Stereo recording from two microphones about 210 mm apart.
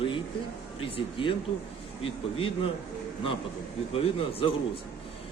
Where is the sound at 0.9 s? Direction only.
25° left (ahead or behind).